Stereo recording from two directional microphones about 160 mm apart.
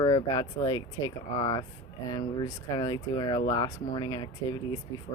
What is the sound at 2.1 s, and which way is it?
Speech, 25° left (ahead or behind).